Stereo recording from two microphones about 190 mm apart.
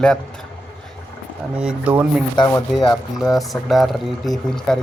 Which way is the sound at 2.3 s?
20° left (ahead or behind).